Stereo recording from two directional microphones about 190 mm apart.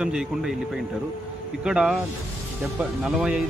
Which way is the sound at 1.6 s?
5° right (ahead or behind).